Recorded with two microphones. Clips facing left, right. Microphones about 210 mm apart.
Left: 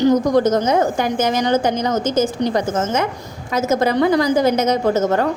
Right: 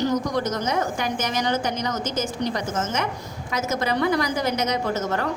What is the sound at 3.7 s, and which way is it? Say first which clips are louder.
Speech: left 7 dB; 45° left (ahead or behind).